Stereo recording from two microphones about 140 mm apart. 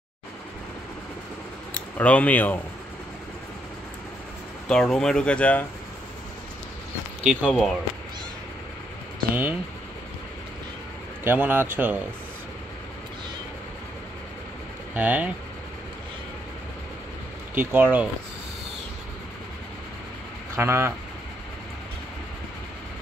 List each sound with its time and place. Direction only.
1.7 s speech: 10° left (ahead or behind)
4.6 s speech: 5° left (ahead or behind)
7.2 s speech: centre (ahead or behind)
9.3 s speech: 15° right (ahead or behind)
11.2 s speech: 15° right (ahead or behind)
15.0 s speech: 10° right (ahead or behind)
17.6 s speech: 15° right (ahead or behind)
20.5 s speech: 15° right (ahead or behind)